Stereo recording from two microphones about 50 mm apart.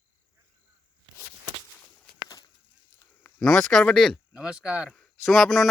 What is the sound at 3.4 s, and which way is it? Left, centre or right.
Speech, centre.